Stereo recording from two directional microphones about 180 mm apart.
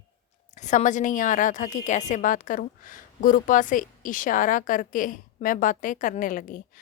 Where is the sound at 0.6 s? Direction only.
40° left (ahead or behind).